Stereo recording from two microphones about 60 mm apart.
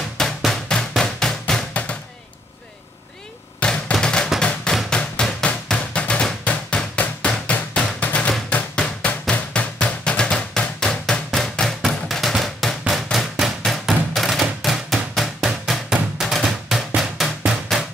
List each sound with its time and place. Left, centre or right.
0.5 s drum: centre
1.7 s a sound: left
3.5 s a sound: centre
3.9 s music: centre
4.8 s drum: centre
6.4 s a sound: centre
7.5 s drum: left; by 13.5 s centre
13.7 s music: centre
17.5 s drum: centre